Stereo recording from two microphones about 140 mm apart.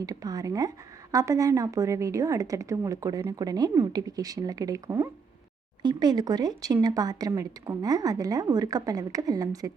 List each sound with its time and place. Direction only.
0.0 s a woman's voice: 25° right (ahead or behind)